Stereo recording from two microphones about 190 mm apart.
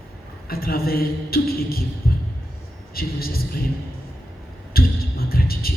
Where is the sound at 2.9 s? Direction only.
50° left (ahead or behind).